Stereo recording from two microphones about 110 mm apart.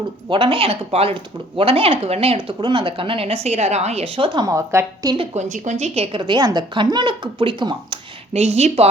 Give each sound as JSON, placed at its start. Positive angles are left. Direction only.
{"t": 0.3, "sound": "speech", "side_deg": -50}
{"t": 2.6, "sound": "speech", "side_deg": -50}
{"t": 4.4, "sound": "a woman's voice", "side_deg": -30}
{"t": 5.1, "sound": "a woman's voice", "side_deg": -65}
{"t": 5.8, "sound": "a woman's voice", "side_deg": -70}
{"t": 8.3, "sound": "a woman's voice", "side_deg": -75}